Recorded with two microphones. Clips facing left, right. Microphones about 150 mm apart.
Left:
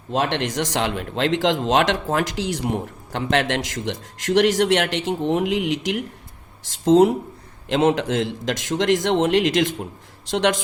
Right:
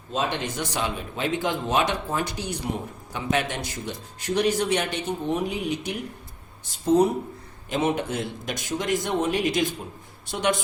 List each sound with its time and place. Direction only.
0.1 s a man's voice: 90° left